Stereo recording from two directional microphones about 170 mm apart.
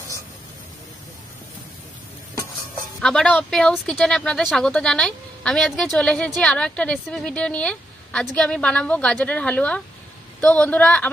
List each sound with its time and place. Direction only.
3.0 s a woman's voice: 5° left (ahead or behind)